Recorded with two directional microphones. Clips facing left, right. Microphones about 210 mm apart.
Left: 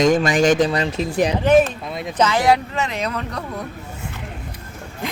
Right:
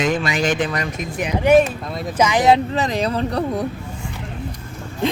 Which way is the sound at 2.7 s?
35° right (ahead or behind).